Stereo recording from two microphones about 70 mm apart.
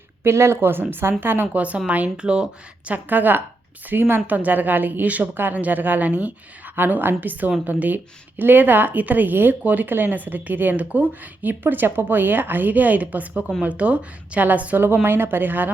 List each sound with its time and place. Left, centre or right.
0.3 s speech: right; by 2.9 s centre
2.9 s speech: right